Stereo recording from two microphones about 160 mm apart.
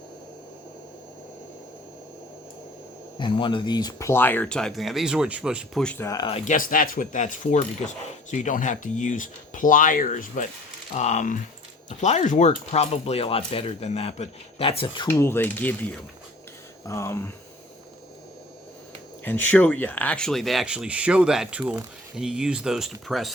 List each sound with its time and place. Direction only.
3.2 s speech: 30° left (ahead or behind); by 5.8 s 5° right (ahead or behind)
5.8 s speech: 10° left (ahead or behind)
6.2 s speech: 45° left (ahead or behind)
15.0 s speech: 15° left (ahead or behind)
19.2 s speech: 10° left (ahead or behind)